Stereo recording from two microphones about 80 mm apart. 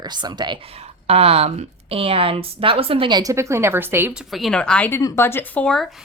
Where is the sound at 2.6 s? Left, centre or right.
Right.